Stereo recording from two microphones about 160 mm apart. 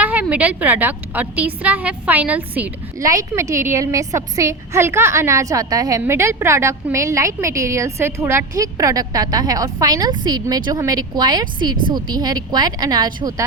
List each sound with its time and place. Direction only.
0.0 s a woman's voice: 10° right (ahead or behind)
3.0 s a woman's voice: 20° right (ahead or behind)